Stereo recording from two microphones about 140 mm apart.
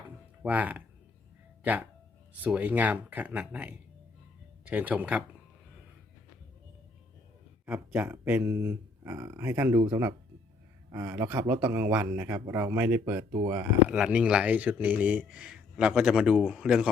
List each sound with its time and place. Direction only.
0.4 s speech: 10° right (ahead or behind)
7.7 s speech: 10° right (ahead or behind)
13.8 s speech: 10° right (ahead or behind)